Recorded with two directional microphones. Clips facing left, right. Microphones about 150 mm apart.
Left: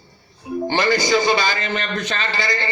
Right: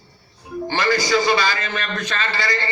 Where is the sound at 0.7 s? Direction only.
20° left (ahead or behind).